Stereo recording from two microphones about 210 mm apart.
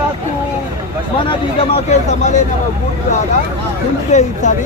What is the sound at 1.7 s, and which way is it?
Speech, 35° left (ahead or behind).